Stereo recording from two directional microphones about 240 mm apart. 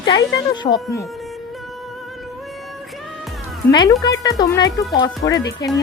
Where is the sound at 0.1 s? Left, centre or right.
Centre.